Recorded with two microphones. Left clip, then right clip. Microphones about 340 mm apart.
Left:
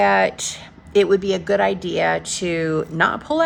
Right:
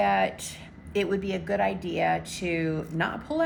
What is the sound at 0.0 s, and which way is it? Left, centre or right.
A woman's voice, centre.